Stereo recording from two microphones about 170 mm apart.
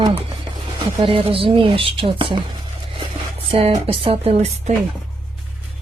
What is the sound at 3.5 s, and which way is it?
Speech, 35° right (ahead or behind).